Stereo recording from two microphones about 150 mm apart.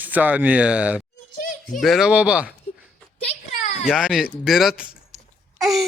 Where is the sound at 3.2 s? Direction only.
50° left (ahead or behind).